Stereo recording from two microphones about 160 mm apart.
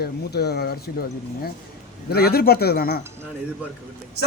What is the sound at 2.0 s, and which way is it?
Speech, 75° left (ahead or behind).